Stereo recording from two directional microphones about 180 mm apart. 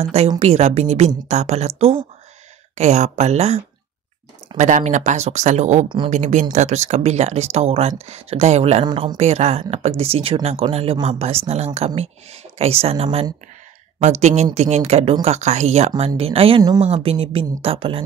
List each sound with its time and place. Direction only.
0.0 s speech: 35° right (ahead or behind)